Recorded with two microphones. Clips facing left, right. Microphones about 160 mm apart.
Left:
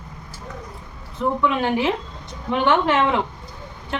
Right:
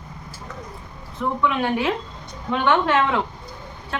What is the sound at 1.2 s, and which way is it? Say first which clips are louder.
Speech: left 3 dB; 25° left (ahead or behind).